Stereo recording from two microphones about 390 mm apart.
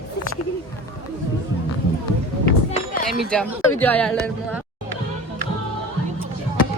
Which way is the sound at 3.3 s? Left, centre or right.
Centre.